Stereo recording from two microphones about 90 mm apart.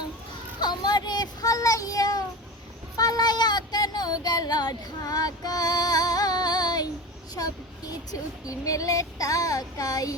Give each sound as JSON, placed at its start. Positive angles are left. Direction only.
{"t": 0.6, "sound": "child singing", "side_deg": 50}
{"t": 3.0, "sound": "a sound", "side_deg": 45}
{"t": 7.3, "sound": "speech", "side_deg": 45}